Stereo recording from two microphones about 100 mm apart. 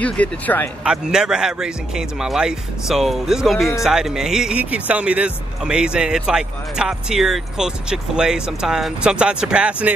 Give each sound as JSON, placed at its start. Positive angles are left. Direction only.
{"t": 0.0, "sound": "speech", "side_deg": 15}
{"t": 0.8, "sound": "speech", "side_deg": -5}